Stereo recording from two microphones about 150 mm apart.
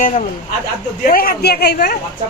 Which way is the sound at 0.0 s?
60° left (ahead or behind).